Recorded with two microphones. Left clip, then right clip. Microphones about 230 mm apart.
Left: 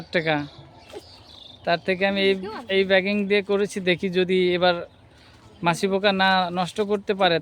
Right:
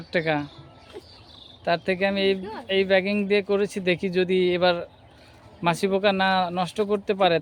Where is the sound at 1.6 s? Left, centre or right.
Centre.